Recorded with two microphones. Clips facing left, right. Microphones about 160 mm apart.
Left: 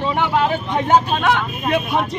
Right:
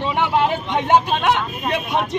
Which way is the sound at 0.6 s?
25° right (ahead or behind).